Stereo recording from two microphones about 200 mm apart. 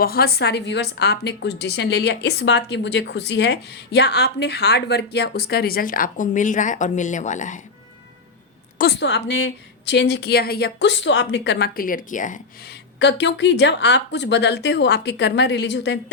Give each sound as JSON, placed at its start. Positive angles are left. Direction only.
{"t": 0.0, "sound": "a woman's voice", "side_deg": 50}
{"t": 8.8, "sound": "a woman's voice", "side_deg": 55}
{"t": 13.0, "sound": "a woman's voice", "side_deg": 60}